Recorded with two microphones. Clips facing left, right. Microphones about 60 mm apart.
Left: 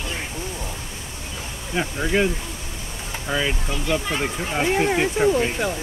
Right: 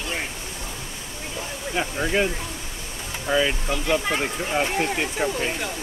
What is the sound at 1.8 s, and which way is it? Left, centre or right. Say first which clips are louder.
Speech: left 2 dB; centre.